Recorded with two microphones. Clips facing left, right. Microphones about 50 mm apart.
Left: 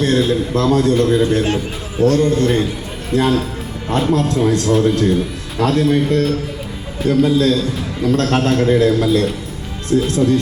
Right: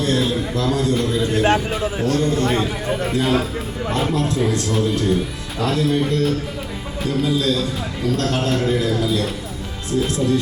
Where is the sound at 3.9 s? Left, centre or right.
Left.